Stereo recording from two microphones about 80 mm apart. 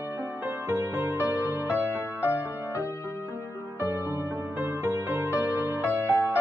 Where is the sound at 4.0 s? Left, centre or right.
Right.